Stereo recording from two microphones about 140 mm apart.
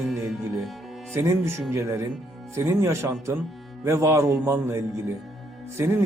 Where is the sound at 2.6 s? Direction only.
20° right (ahead or behind).